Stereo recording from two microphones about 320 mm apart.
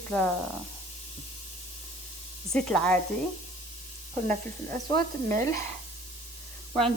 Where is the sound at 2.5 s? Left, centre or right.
Centre.